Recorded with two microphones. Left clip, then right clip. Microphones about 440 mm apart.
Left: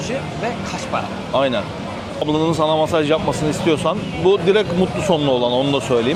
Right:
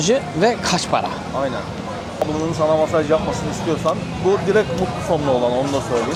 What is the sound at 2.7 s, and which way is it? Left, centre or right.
Speech, left.